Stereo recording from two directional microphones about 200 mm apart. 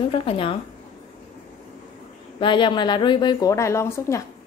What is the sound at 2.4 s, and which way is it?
A woman's voice, 25° left (ahead or behind).